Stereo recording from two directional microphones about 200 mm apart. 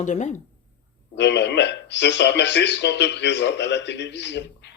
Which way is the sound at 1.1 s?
60° left (ahead or behind).